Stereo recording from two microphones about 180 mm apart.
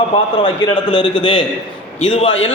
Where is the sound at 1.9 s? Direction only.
35° left (ahead or behind).